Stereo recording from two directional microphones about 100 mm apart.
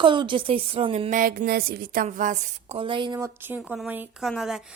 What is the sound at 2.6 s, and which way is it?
Speech, 75° right (ahead or behind).